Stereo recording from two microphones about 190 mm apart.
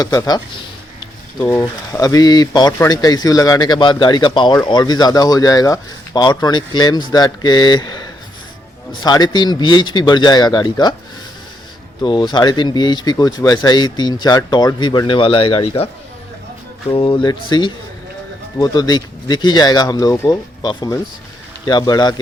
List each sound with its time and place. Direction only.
0.0 s a sound: 20° left (ahead or behind)
1.5 s speech: 15° left (ahead or behind)
12.0 s speech: 25° left (ahead or behind)
16.9 s speech: 25° left (ahead or behind)